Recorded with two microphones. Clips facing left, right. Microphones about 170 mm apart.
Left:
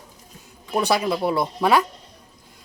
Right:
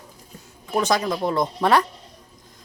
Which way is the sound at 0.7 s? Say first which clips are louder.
Left 1 dB; 10° left (ahead or behind).